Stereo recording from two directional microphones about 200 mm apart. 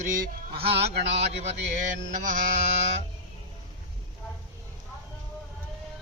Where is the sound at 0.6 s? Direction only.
30° right (ahead or behind).